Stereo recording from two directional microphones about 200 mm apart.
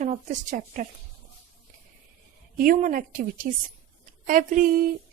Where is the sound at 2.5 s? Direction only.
45° right (ahead or behind).